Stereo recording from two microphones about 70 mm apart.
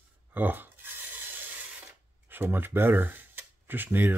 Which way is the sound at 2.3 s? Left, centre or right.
Right.